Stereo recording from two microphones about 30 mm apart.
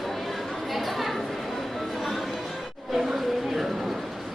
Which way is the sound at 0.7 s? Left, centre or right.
Centre.